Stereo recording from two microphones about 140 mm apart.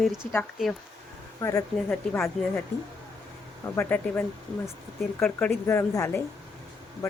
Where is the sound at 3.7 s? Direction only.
10° left (ahead or behind).